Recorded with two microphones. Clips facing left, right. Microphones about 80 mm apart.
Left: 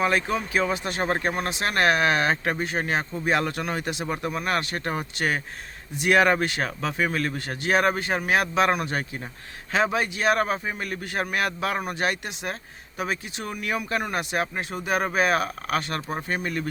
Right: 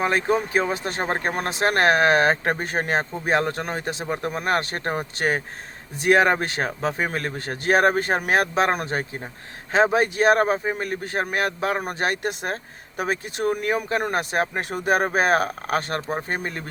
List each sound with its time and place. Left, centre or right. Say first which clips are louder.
0.0 s speech: right 2 dB; right